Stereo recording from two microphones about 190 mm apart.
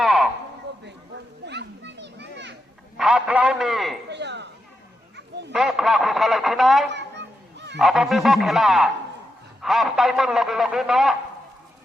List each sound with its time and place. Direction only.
0.0 s a sound: centre (ahead or behind)
1.5 s children playing: 65° right (ahead or behind)
3.0 s speech: 5° right (ahead or behind)
4.1 s speech: 65° right (ahead or behind)
5.1 s children playing: 65° right (ahead or behind)
5.5 s speech: centre (ahead or behind)